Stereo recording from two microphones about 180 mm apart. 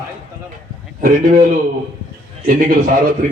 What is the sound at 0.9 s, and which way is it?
Speech, 50° right (ahead or behind).